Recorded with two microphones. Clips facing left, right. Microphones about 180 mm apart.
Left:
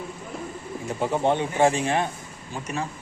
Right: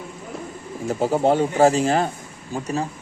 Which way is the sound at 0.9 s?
40° right (ahead or behind).